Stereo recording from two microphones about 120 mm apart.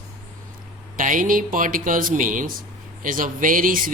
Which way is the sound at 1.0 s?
90° right.